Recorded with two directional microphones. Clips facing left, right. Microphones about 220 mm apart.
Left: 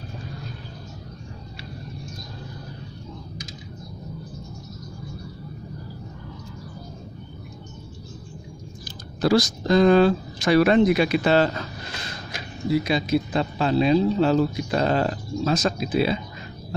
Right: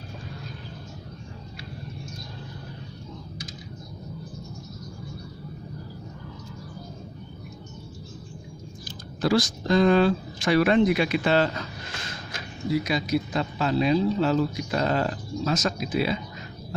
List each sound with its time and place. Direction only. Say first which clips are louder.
9.2 s speech: left 3 dB; 40° left (ahead or behind)
12.3 s speech: left 3 dB; 30° left (ahead or behind)